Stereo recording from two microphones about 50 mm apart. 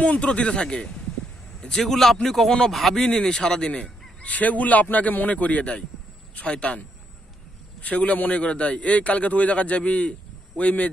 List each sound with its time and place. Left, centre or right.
0.0 s a man's voice: left
4.2 s a man's voice: left
7.8 s a man's voice: left